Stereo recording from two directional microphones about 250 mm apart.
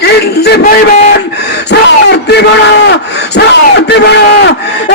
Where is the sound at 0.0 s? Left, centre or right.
Left.